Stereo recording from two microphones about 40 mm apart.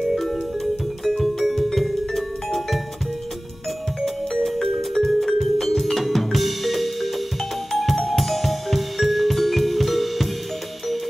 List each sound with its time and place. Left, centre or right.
0.1 s music: centre
4.0 s music: centre